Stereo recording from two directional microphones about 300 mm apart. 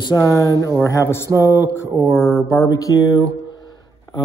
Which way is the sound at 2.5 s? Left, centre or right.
Centre.